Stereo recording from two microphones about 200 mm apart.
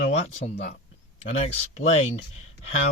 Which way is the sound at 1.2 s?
35° left (ahead or behind).